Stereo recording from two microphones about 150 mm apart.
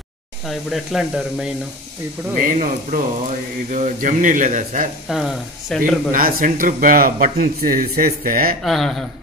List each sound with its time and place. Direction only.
0.5 s speech: centre (ahead or behind)
2.3 s speech: 60° right (ahead or behind)
5.0 s speech: centre (ahead or behind)
6.1 s a man's voice: 70° right (ahead or behind)
8.6 s speech: centre (ahead or behind)